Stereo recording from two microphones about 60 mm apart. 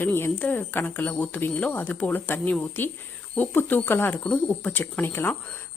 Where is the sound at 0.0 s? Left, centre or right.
Left.